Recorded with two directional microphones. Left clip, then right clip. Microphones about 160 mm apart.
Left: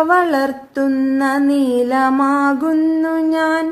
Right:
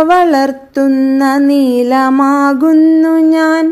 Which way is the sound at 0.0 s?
30° right (ahead or behind).